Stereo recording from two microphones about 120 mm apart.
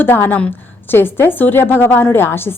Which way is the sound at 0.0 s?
15° left (ahead or behind).